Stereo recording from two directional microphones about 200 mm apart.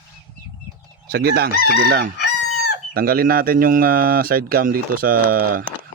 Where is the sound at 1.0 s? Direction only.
50° right (ahead or behind).